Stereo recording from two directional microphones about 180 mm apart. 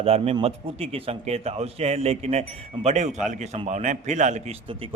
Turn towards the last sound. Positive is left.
turn(degrees=-40)  # may be behind; listen again after turning